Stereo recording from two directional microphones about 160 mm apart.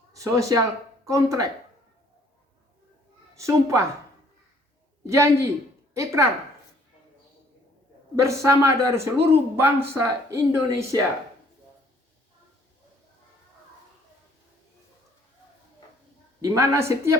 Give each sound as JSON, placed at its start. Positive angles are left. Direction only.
{"t": 0.1, "sound": "a woman's voice", "side_deg": -20}
{"t": 3.3, "sound": "a woman's voice", "side_deg": -20}
{"t": 5.0, "sound": "speech", "side_deg": -20}
{"t": 8.1, "sound": "speech", "side_deg": -20}
{"t": 16.4, "sound": "speech", "side_deg": -20}